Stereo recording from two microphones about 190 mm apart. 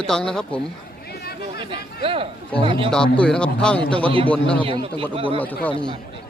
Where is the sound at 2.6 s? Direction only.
25° right (ahead or behind).